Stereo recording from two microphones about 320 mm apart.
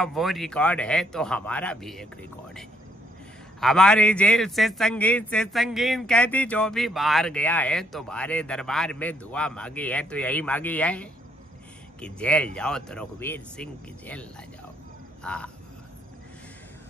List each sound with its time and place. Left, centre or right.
0.0 s a man's voice: centre
3.6 s a man's voice: centre
15.2 s a man's voice: centre